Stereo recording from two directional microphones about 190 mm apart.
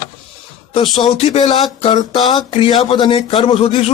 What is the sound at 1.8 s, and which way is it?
Speech, 25° left (ahead or behind).